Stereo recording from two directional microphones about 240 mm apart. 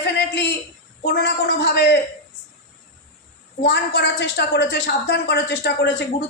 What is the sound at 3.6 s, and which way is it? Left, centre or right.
A woman's voice, left.